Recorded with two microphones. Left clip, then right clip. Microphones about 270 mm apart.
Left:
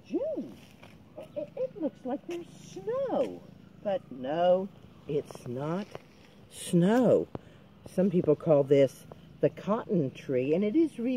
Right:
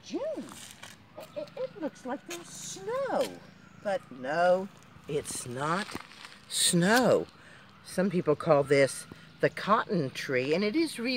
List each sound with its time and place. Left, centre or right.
0.1 s a sound: right
1.8 s speech: right
6.5 s speech: centre